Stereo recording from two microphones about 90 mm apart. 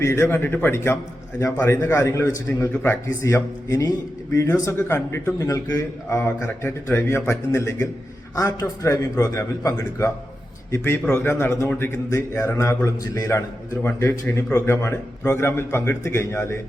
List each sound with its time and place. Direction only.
0.0 s a man's voice: 30° left (ahead or behind)
2.7 s a man's voice: 25° left (ahead or behind)